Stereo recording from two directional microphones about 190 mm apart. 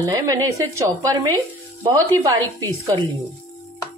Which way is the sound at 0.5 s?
15° right (ahead or behind).